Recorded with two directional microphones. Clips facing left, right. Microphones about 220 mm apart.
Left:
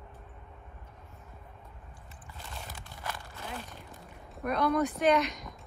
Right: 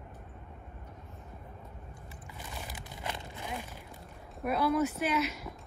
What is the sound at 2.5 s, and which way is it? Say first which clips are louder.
Crumpling: right 1 dB; 15° right (ahead or behind).